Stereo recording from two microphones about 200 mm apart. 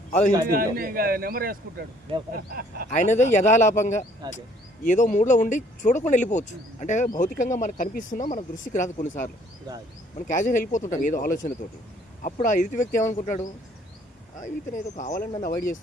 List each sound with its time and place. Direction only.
0.5 s a man's voice: 45° right (ahead or behind)
2.9 s speech: 40° left (ahead or behind)
4.2 s speech: 20° right (ahead or behind)
4.8 s speech: 40° left (ahead or behind)